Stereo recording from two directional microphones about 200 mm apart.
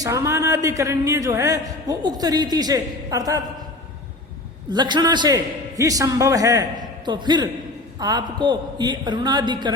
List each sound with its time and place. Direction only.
0.0 s a man's voice: 15° right (ahead or behind)
4.7 s a man's voice: 20° right (ahead or behind)